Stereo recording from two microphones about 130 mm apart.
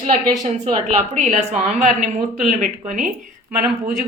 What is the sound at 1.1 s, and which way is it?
Speech, 65° right (ahead or behind).